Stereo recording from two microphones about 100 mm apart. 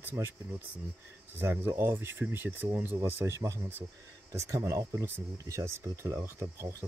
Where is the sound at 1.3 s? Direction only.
25° right (ahead or behind).